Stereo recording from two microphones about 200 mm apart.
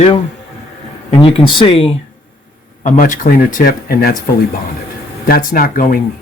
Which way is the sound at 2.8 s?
40° left (ahead or behind).